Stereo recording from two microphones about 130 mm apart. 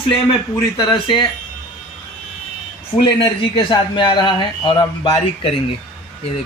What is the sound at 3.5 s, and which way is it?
A man's voice, 35° left (ahead or behind).